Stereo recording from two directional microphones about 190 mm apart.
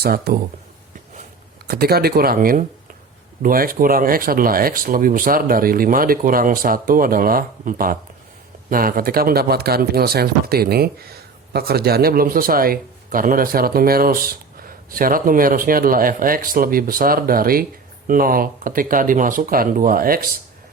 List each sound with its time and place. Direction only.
0.0 s speech: 55° right (ahead or behind)
1.6 s speech: 55° right (ahead or behind)